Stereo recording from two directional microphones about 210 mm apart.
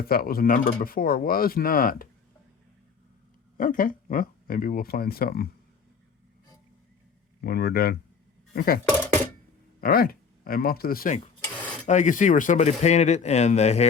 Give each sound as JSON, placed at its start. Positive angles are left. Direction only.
{"t": 0.1, "sound": "speech", "side_deg": 45}
{"t": 3.6, "sound": "speech", "side_deg": 40}
{"t": 7.4, "sound": "speech", "side_deg": 45}
{"t": 9.8, "sound": "speech", "side_deg": 45}